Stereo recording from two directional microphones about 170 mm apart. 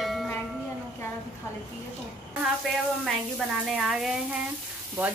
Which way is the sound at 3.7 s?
5° right (ahead or behind).